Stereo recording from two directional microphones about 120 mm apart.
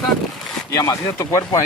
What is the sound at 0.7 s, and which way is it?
Speech, 30° left (ahead or behind).